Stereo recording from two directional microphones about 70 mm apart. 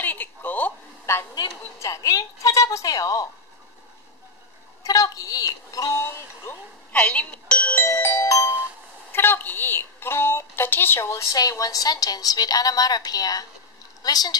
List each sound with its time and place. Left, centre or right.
0.0 s a sound: left
1.8 s a sound: left
4.8 s a woman's voice: left
6.5 s a woman's voice: left
6.9 s music: left
7.7 s music: left
9.1 s a woman's voice: left
11.3 s a woman's voice: left